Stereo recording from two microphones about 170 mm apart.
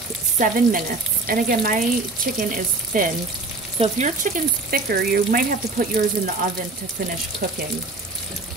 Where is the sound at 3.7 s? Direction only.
45° right (ahead or behind).